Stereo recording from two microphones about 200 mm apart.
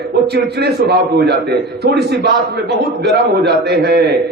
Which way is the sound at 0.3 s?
55° right (ahead or behind).